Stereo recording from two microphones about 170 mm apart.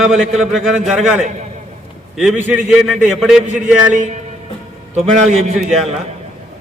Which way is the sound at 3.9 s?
50° right (ahead or behind).